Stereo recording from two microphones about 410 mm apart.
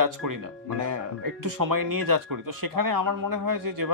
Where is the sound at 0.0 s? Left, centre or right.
Right.